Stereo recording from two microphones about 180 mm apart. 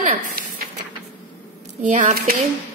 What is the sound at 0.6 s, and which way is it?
Printer, 55° right (ahead or behind).